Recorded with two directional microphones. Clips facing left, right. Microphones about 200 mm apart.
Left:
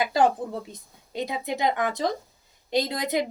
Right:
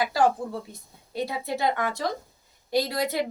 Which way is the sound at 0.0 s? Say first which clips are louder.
Left 1 dB; 20° left (ahead or behind).